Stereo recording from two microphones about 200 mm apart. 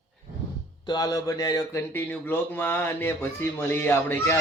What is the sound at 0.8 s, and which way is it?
Speech, 20° left (ahead or behind).